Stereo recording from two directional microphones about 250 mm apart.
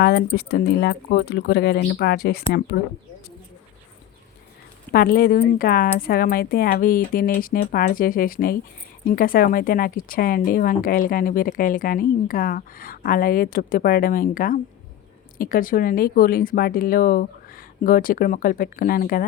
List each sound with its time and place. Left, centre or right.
0.0 s speech: left
4.9 s speech: left